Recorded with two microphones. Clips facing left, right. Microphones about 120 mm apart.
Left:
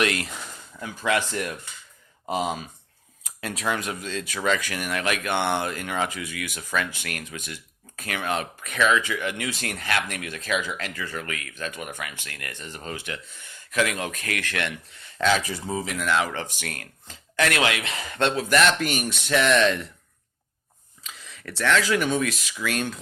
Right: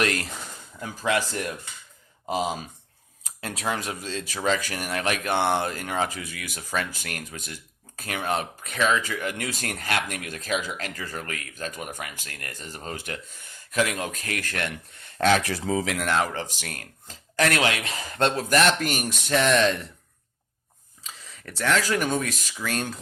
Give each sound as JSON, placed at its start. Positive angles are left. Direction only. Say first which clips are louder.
{"t": 0.0, "sound": "speech", "louder": "left 1 dB", "side_deg": -40}
{"t": 3.4, "sound": "speech", "louder": "left 1 dB", "side_deg": -30}
{"t": 16.0, "sound": "speech", "louder": "left 3 dB", "side_deg": -45}
{"t": 16.6, "sound": "speech", "louder": "left 2 dB", "side_deg": -35}
{"t": 21.1, "sound": "speech", "louder": "left 2 dB", "side_deg": -40}